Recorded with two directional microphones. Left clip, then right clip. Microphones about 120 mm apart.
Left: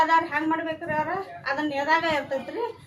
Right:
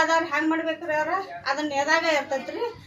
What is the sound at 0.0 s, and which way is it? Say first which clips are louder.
A woman's voice: left 1 dB; 15° left (ahead or behind).